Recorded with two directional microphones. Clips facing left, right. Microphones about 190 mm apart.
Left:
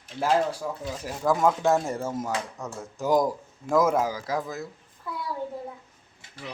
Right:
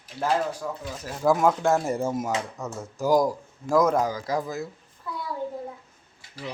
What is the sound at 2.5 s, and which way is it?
Speech, centre (ahead or behind).